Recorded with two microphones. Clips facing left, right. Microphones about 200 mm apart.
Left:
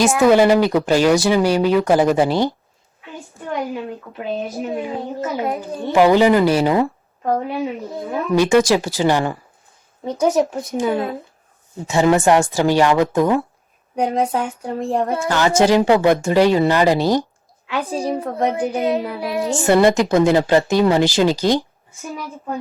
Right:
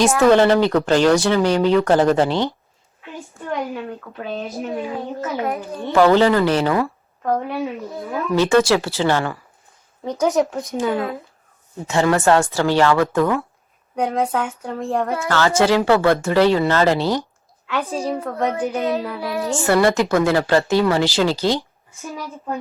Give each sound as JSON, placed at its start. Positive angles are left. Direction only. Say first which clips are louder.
{"t": 0.0, "sound": "speech", "louder": "left 1 dB", "side_deg": 10}
{"t": 4.2, "sound": "a woman's voice", "louder": "left 3 dB", "side_deg": 15}
{"t": 8.4, "sound": "speech", "louder": "left 1 dB", "side_deg": 15}
{"t": 10.7, "sound": "a woman's voice", "louder": "left 1 dB", "side_deg": 15}
{"t": 15.0, "sound": "a woman's voice", "louder": "left 2 dB", "side_deg": 25}
{"t": 15.3, "sound": "a woman's voice", "louder": "left 2 dB", "side_deg": 15}